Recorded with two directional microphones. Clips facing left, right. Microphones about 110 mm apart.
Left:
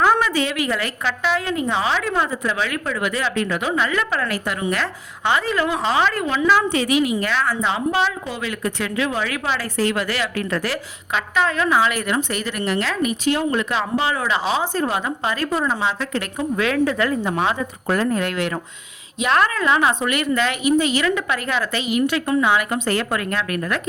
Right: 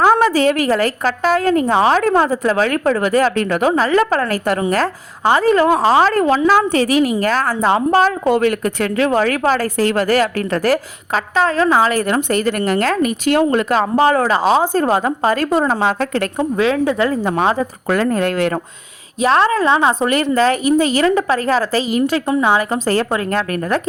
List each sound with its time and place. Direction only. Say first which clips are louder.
0.0 s a woman's voice: right 6 dB; 35° right (ahead or behind)
3.7 s a woman's voice: right 7 dB; 35° right (ahead or behind)
16.6 s a woman's voice: right 4 dB; 25° right (ahead or behind)
17.2 s a woman's voice: right 5 dB; 40° right (ahead or behind)
17.8 s speech: right 3 dB; 90° right
18.1 s a woman's voice: right 5 dB; 40° right (ahead or behind)
19.2 s a woman's voice: right 5 dB; 30° right (ahead or behind)